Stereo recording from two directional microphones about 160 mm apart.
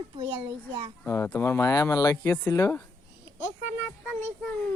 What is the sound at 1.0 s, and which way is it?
Speech, 10° left (ahead or behind).